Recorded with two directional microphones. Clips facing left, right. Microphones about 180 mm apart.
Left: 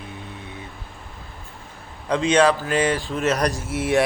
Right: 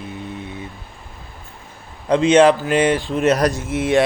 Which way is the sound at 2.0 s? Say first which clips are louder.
Right 5 dB; 25° right (ahead or behind).